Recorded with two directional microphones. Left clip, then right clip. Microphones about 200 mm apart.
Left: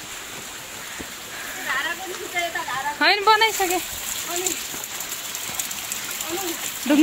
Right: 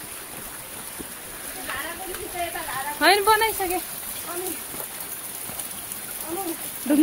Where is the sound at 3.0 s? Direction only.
15° left (ahead or behind).